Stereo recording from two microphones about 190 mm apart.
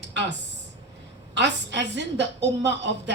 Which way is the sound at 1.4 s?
65° right (ahead or behind).